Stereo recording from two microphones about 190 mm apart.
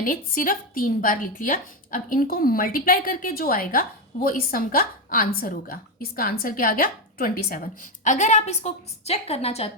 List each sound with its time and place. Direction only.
0.0 s speech: 45° left (ahead or behind)